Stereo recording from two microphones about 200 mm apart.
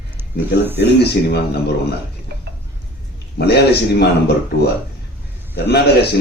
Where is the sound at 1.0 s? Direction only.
55° left (ahead or behind).